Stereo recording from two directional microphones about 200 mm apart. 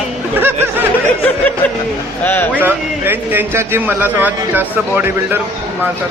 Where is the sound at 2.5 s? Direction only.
10° right (ahead or behind).